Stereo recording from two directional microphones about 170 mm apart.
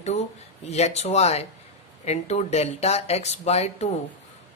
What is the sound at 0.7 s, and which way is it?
Speech, 40° left (ahead or behind).